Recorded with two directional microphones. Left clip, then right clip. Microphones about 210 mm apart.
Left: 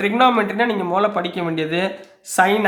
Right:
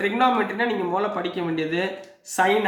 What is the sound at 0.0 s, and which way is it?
Speech, 40° left (ahead or behind).